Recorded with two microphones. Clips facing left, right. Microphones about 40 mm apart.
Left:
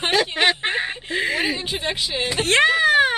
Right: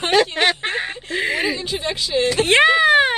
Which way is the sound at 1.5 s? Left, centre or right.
Left.